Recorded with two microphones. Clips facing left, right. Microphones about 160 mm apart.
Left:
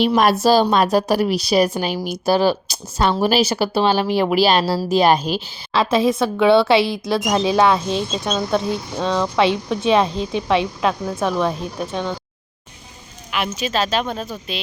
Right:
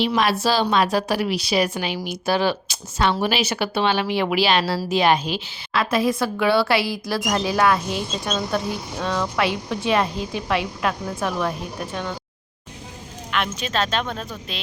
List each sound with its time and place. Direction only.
0.0 s speech: 45° left (ahead or behind)
5.8 s a woman's voice: 25° left (ahead or behind)
13.3 s a woman's voice: 5° left (ahead or behind)